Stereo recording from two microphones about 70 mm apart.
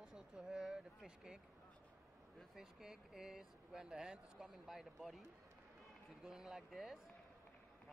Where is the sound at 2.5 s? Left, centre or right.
Centre.